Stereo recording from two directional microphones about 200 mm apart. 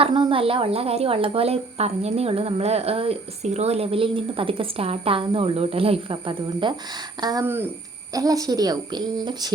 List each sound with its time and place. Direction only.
0.0 s speech: 25° right (ahead or behind)